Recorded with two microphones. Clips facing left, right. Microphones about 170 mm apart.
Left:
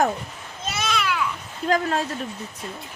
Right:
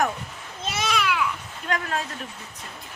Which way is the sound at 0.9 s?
5° right (ahead or behind).